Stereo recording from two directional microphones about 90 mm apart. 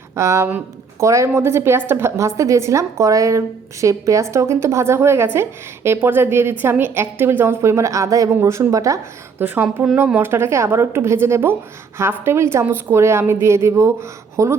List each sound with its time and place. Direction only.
0.2 s a woman's voice: 30° right (ahead or behind)
9.4 s a woman's voice: 20° right (ahead or behind)